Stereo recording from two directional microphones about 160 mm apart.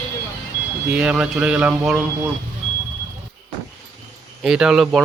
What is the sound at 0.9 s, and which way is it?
Speech, 5° right (ahead or behind).